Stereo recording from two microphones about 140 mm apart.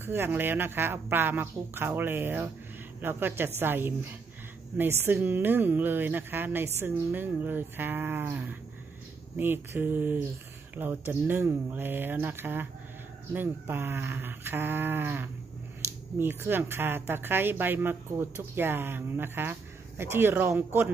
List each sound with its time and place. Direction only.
0.0 s speech: 15° right (ahead or behind)